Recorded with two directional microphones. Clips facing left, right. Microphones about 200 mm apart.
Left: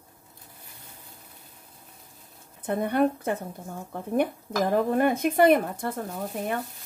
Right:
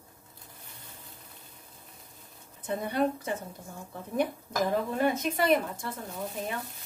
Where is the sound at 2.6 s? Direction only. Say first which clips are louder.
Left 5 dB; 55° left (ahead or behind).